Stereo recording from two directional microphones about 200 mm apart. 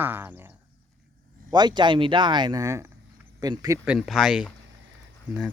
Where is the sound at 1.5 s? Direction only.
20° right (ahead or behind).